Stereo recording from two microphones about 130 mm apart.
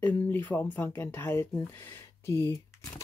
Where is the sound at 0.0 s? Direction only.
15° left (ahead or behind).